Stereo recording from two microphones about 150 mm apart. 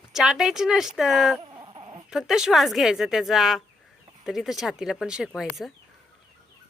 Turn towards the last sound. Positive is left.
turn(degrees=-5)  # may be behind; listen again after turning